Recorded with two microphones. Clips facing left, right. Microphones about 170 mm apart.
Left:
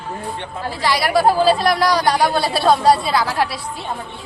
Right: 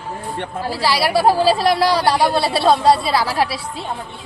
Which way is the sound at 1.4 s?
Centre (ahead or behind).